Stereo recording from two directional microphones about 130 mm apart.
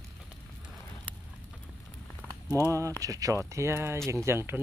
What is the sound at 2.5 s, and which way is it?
Speech, 25° right (ahead or behind).